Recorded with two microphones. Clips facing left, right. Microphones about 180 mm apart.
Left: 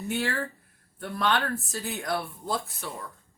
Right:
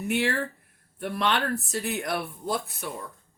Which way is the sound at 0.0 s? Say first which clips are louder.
Right 3 dB; 20° right (ahead or behind).